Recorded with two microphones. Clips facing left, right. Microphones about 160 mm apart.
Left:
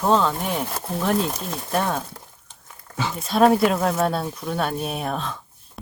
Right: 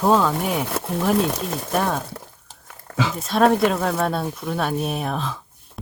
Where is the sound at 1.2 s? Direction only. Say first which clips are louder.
Right 3 dB; 75° right (ahead or behind).